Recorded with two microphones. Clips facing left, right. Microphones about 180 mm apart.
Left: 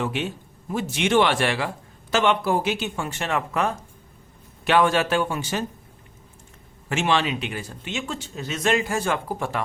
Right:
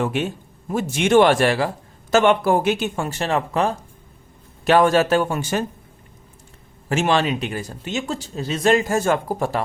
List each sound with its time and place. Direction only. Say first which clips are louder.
0.0 s a man's voice: right 4 dB; 45° right (ahead or behind)
6.8 s speech: right 4 dB; 40° right (ahead or behind)